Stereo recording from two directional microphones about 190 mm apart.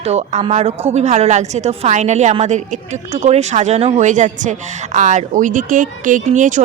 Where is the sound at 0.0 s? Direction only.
35° right (ahead or behind).